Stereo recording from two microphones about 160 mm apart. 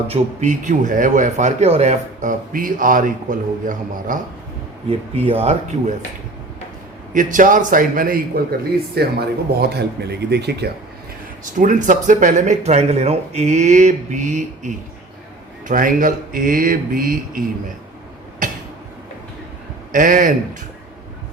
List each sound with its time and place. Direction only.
0.1 s a man's voice: 45° right (ahead or behind)
4.9 s speech: 40° right (ahead or behind)
7.1 s speech: 55° right (ahead or behind)
9.0 s speech: 80° right
11.5 s a man's voice: 55° right (ahead or behind)
19.9 s speech: 60° right (ahead or behind)